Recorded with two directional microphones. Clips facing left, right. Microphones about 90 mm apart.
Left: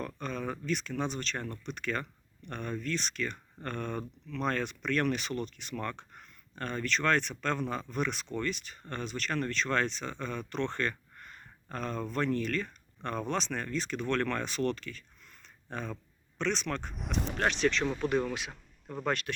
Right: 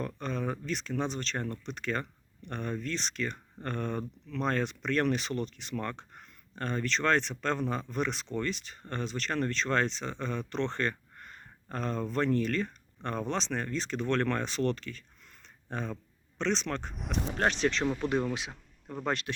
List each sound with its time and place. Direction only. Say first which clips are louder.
0.2 s speech: right 2 dB; 30° right (ahead or behind)
16.4 s speech: right 1 dB; 30° right (ahead or behind)
16.9 s speech: even; centre (ahead or behind)
17.3 s speech: even; 30° right (ahead or behind)
18.0 s speech: even; 20° right (ahead or behind)